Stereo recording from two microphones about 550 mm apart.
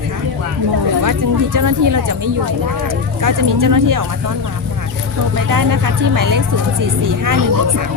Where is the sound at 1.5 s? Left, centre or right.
Right.